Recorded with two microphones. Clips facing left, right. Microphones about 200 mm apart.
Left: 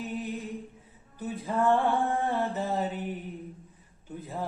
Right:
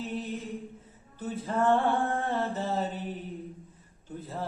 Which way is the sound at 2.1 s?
15° left (ahead or behind).